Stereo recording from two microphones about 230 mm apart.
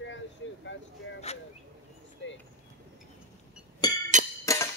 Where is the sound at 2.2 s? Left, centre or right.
Left.